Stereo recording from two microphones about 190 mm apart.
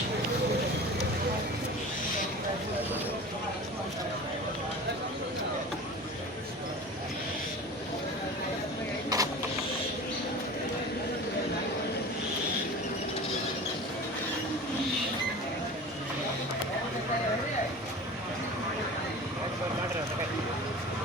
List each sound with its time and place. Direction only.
9.1 s vehicle: 20° right (ahead or behind)